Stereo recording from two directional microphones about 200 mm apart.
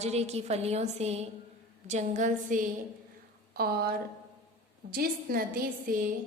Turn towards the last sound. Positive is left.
turn(degrees=-45)  # may be behind; listen again after turning